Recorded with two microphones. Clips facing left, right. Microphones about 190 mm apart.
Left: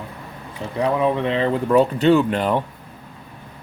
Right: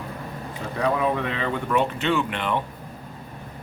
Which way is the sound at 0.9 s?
25° left (ahead or behind).